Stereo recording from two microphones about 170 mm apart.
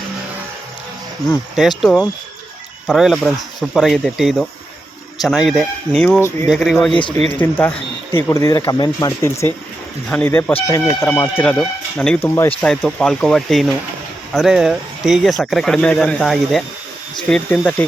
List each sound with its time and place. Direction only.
1.5 s speech: centre (ahead or behind)